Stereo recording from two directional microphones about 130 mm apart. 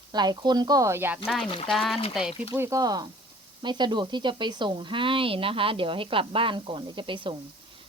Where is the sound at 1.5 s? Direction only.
40° left (ahead or behind).